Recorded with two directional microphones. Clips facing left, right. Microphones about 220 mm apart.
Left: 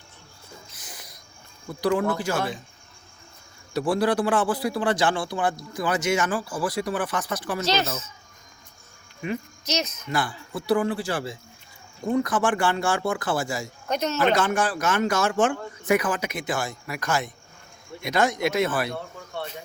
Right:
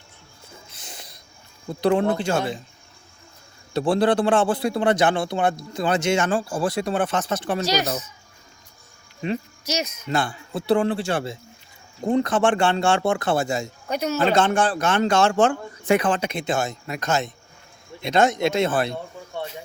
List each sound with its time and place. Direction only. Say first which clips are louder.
0.8 s snort: right 2 dB; 25° right (ahead or behind)
1.8 s a man's voice: right 3 dB; 25° right (ahead or behind)
3.8 s a man's voice: right 3 dB; 30° right (ahead or behind)
7.9 s a child's voice: right 5 dB; 35° right (ahead or behind)
9.6 s speech: right 1 dB; 10° right (ahead or behind)
10.1 s a man's voice: right 5 dB; 25° right (ahead or behind)
13.8 s speech: even; 10° right (ahead or behind)
14.3 s a man's voice: right 4 dB; 30° right (ahead or behind)